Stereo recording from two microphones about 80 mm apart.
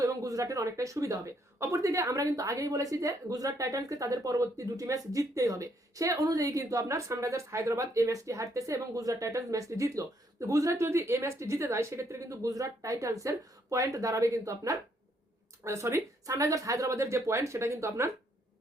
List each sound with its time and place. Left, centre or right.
0.0 s a woman's voice: right